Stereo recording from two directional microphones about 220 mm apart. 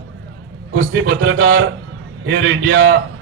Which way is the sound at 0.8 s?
60° right (ahead or behind).